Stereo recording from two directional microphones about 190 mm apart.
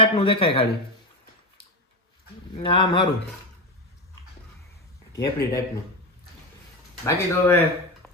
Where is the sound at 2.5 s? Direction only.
25° left (ahead or behind).